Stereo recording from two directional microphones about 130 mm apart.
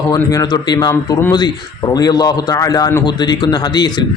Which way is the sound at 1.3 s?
30° left (ahead or behind).